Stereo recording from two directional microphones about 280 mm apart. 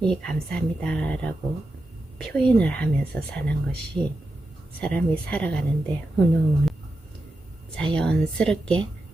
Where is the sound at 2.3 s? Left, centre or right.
Centre.